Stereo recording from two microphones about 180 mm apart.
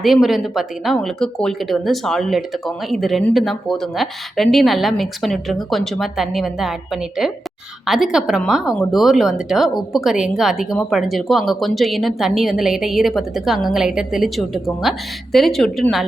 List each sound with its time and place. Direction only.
0.0 s speech: centre (ahead or behind)